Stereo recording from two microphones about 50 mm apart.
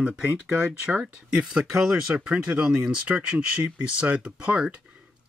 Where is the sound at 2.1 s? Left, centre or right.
Centre.